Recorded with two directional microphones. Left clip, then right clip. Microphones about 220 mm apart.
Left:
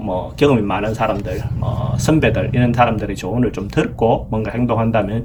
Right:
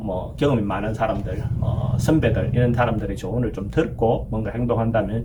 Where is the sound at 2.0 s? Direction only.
45° left (ahead or behind).